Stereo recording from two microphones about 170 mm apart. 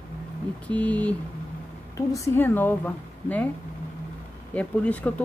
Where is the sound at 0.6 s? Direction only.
10° left (ahead or behind).